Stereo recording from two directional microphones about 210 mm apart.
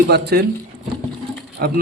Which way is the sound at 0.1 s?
50° right (ahead or behind).